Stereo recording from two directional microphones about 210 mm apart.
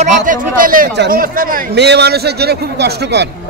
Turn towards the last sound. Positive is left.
turn(degrees=-55)  # may be behind; listen again after turning